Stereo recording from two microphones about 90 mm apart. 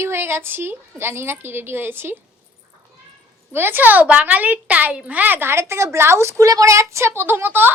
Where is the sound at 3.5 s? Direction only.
25° right (ahead or behind).